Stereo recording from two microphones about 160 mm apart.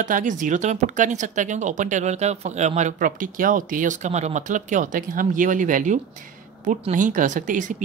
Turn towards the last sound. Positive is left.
turn(degrees=-50)  # may be behind; listen again after turning